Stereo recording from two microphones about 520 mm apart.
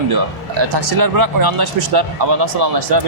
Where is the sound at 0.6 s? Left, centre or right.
Right.